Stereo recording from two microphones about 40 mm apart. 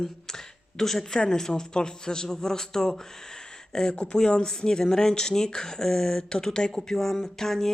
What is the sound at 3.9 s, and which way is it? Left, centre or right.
Speech, left.